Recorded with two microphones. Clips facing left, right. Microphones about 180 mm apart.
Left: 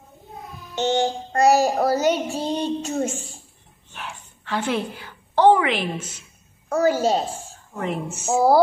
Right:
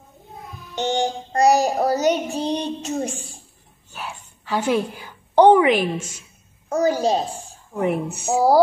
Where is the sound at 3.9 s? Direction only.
10° right (ahead or behind).